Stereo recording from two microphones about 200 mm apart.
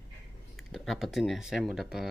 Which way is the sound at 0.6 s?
Centre (ahead or behind).